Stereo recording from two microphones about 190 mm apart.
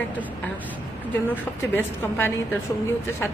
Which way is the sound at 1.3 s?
10° left (ahead or behind).